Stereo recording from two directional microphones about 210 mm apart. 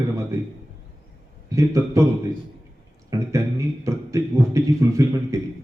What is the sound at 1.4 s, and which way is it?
Speech, 15° right (ahead or behind).